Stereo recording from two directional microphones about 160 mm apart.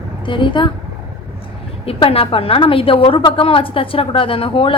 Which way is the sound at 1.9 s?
35° left (ahead or behind).